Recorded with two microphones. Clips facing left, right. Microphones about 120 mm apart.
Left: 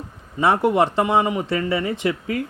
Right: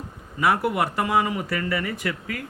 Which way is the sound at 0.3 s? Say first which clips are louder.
Left 5 dB; 25° left (ahead or behind).